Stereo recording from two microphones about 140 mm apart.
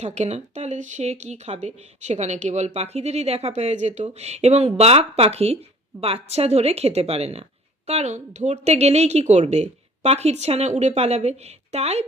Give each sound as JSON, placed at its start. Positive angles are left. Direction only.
{"t": 0.0, "sound": "speech", "side_deg": -50}